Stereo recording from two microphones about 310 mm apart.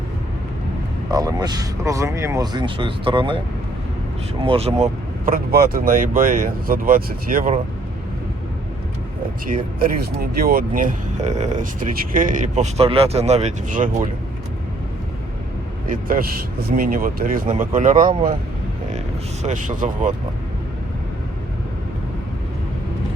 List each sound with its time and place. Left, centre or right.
1.1 s speech: centre
4.4 s speech: centre
9.8 s speech: right
15.9 s speech: right
19.4 s speech: right